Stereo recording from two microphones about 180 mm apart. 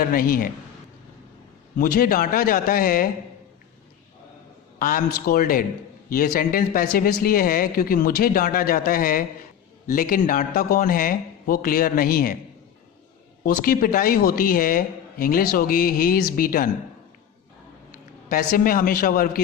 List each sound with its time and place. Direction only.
0.0 s speech: 55° left (ahead or behind)
1.8 s speech: 55° left (ahead or behind)
4.8 s speech: 50° left (ahead or behind)
13.4 s speech: 50° left (ahead or behind)
18.3 s speech: 55° left (ahead or behind)